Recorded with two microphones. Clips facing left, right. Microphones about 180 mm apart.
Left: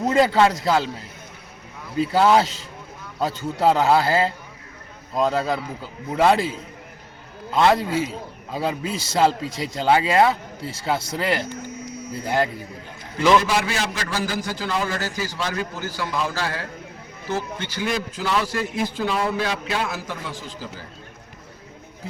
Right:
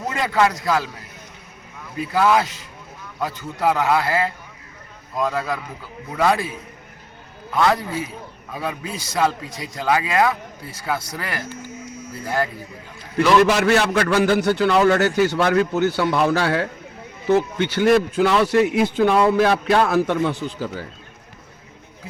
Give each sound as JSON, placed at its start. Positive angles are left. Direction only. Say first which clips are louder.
{"t": 0.1, "sound": "a man's voice", "louder": "left 3 dB", "side_deg": 30}
{"t": 2.0, "sound": "a man's voice", "louder": "left 1 dB", "side_deg": 30}
{"t": 13.4, "sound": "speech", "louder": "right 7 dB", "side_deg": -65}